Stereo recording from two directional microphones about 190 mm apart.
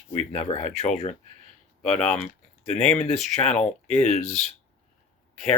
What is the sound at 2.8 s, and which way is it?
Speech, 5° left (ahead or behind).